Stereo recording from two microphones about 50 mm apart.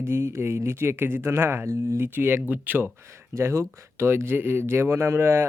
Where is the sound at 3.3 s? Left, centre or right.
Right.